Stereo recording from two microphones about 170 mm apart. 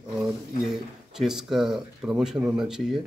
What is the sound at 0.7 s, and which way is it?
Speech, 5° right (ahead or behind).